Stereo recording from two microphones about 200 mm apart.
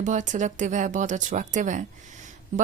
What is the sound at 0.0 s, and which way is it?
A woman's voice, 40° right (ahead or behind).